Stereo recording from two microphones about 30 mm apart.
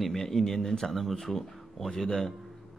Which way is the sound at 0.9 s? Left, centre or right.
Centre.